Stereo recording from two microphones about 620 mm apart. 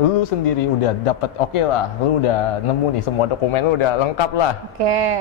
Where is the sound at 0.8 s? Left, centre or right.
Left.